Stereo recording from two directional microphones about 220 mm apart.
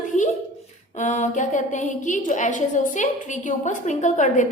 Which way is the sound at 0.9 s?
30° left (ahead or behind).